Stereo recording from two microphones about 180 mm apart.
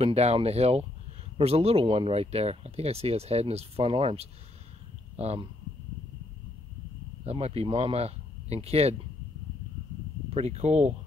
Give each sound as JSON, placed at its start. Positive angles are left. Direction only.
{"t": 0.0, "sound": "speech", "side_deg": -35}
{"t": 7.2, "sound": "speech", "side_deg": -35}
{"t": 10.3, "sound": "speech", "side_deg": -35}